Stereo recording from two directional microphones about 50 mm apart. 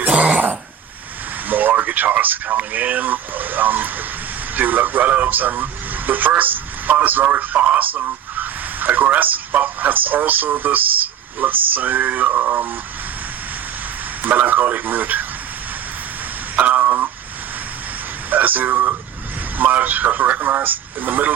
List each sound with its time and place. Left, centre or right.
0.0 s dog: right
1.5 s a man's voice: right
14.2 s a man's voice: right
16.6 s a sound: right
18.3 s a man's voice: right